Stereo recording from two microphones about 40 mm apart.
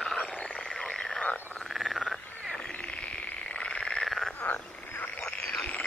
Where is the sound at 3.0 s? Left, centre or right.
Left.